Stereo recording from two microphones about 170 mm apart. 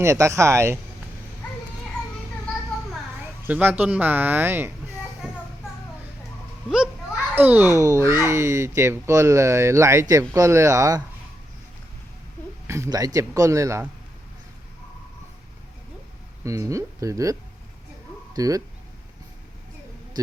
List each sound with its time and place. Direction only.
0.0 s speech: 15° right (ahead or behind)
3.2 s speech: 10° right (ahead or behind)
5.2 s child singing: 5° right (ahead or behind)
7.3 s speech: 10° right (ahead or behind)
12.6 s a man's voice: 15° right (ahead or behind)
16.4 s a man's voice: 20° right (ahead or behind)
18.3 s a man's voice: 20° right (ahead or behind)